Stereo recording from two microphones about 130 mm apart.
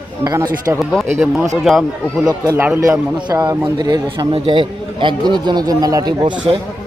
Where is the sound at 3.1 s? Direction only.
35° right (ahead or behind).